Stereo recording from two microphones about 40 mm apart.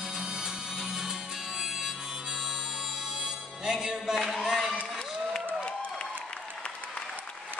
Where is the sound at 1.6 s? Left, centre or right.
Centre.